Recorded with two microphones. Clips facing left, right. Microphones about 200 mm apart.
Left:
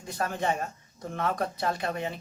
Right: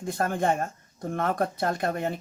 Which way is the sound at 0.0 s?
50° right (ahead or behind).